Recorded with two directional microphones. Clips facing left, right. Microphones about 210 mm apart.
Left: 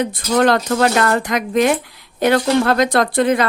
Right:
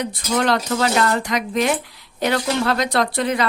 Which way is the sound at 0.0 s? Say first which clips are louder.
Left 5 dB; 50° left (ahead or behind).